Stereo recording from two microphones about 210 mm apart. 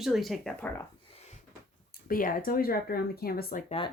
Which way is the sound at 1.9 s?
45° left (ahead or behind).